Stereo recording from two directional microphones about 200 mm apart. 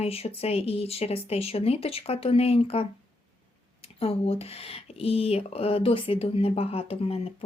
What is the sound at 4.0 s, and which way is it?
Speech, 30° left (ahead or behind).